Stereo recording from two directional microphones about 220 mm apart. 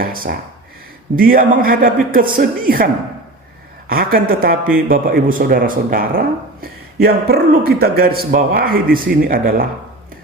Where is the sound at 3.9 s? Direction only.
40° right (ahead or behind).